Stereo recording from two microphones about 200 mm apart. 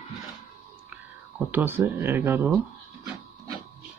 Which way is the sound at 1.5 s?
10° right (ahead or behind).